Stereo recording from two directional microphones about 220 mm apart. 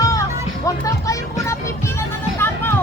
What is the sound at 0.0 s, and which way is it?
Music, 15° left (ahead or behind).